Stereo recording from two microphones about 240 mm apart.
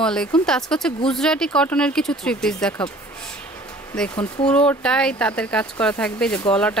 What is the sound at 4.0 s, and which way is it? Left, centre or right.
Speech, centre.